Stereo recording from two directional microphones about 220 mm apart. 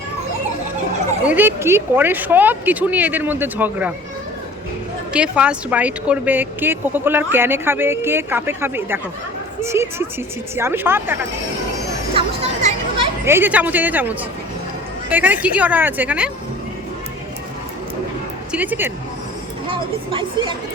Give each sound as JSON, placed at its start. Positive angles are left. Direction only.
{"t": 1.3, "sound": "speech", "side_deg": -10}
{"t": 5.1, "sound": "speech", "side_deg": -5}
{"t": 12.1, "sound": "music", "side_deg": -25}
{"t": 13.2, "sound": "speech", "side_deg": -10}
{"t": 15.1, "sound": "speech", "side_deg": -5}
{"t": 18.5, "sound": "speech", "side_deg": -5}